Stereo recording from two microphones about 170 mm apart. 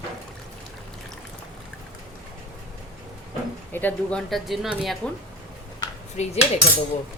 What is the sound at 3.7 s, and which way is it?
Speech, 10° left (ahead or behind).